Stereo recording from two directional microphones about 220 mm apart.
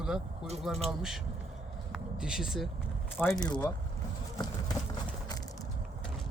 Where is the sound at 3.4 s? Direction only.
20° left (ahead or behind).